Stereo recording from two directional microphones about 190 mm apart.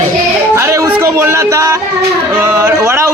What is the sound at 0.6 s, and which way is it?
A man's voice, 15° right (ahead or behind).